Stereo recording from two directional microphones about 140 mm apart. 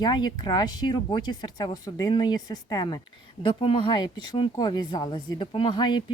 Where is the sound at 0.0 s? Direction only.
30° left (ahead or behind).